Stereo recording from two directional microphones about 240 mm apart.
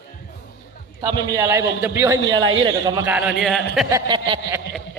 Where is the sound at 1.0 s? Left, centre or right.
Centre.